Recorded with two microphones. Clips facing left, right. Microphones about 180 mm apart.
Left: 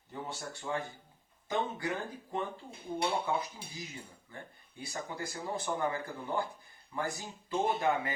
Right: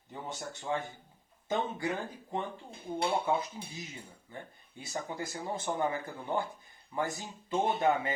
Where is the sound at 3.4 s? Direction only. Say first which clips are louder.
Right 1 dB; 20° right (ahead or behind).